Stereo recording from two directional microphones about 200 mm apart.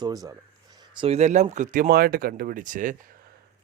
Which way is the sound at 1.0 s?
30° right (ahead or behind).